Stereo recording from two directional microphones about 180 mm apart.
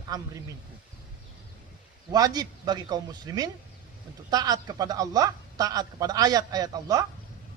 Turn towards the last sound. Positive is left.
turn(degrees=-20)  # may be behind; listen again after turning